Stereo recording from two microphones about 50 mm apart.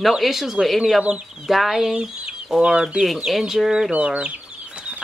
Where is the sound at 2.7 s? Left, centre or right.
Centre.